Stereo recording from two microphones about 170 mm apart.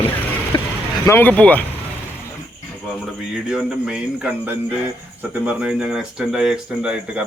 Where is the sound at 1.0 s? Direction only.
10° left (ahead or behind).